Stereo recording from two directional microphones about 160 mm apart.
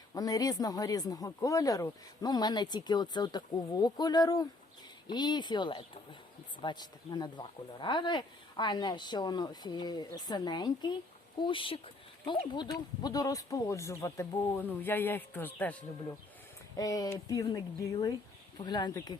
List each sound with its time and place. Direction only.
0.1 s speech: 25° left (ahead or behind)
16.7 s speech: 20° left (ahead or behind)